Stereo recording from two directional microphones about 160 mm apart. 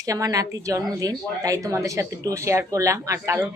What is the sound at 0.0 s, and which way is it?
A man's voice, 20° right (ahead or behind).